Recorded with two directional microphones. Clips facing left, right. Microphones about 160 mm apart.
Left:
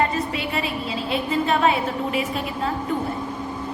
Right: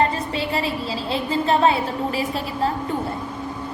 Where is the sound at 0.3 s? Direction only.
30° right (ahead or behind).